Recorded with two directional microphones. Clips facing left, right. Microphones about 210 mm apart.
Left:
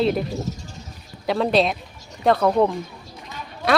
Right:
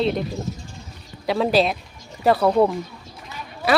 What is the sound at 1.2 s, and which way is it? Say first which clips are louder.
Speech: even; centre (ahead or behind).